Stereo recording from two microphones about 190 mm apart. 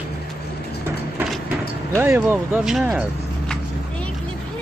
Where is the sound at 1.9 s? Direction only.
10° right (ahead or behind).